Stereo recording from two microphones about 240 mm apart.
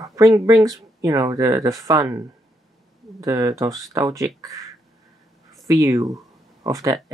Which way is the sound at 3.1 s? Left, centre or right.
Centre.